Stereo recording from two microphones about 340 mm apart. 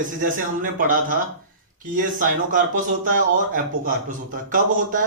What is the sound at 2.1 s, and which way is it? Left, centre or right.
Speech, right.